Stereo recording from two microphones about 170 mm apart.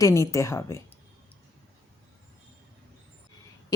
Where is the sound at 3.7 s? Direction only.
20° left (ahead or behind).